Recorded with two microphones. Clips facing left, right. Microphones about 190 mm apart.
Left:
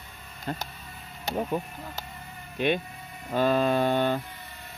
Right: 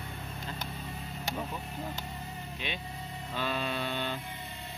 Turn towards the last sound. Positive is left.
turn(degrees=50)  # may be behind; listen again after turning